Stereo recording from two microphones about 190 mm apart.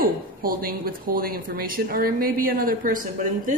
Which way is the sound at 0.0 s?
50° right (ahead or behind).